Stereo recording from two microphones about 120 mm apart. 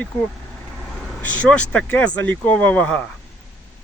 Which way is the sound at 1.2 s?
10° left (ahead or behind).